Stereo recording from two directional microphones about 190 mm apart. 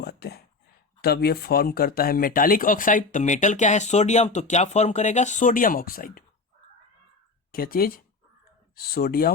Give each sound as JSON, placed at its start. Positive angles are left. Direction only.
{"t": 0.0, "sound": "a sound", "side_deg": 55}
{"t": 1.0, "sound": "speech", "side_deg": 55}
{"t": 7.5, "sound": "speech", "side_deg": 50}